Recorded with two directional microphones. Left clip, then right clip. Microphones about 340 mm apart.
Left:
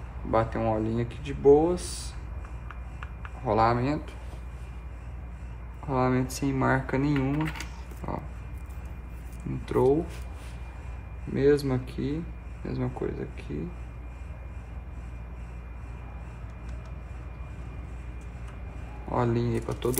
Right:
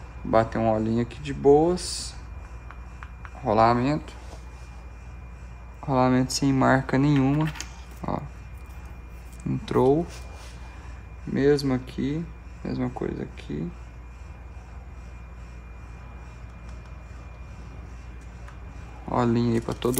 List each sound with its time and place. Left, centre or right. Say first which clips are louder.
0.3 s speech: right 4 dB; right
3.4 s speech: right 4 dB; right
5.9 s speech: right 4 dB; right
9.7 s speech: right 2 dB; right
11.3 s speech: right 1 dB; right
19.1 s speech: right 4 dB; right